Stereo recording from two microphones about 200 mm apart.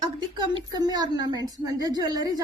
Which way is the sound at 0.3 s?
20° right (ahead or behind).